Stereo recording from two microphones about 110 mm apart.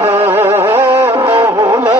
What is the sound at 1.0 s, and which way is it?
Music, 55° right (ahead or behind).